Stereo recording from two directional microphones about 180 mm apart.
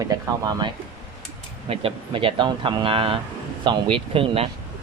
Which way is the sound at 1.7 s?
30° right (ahead or behind).